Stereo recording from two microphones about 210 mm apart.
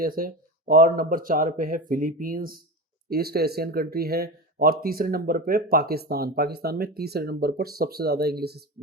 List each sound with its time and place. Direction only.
0.0 s speech: 45° right (ahead or behind)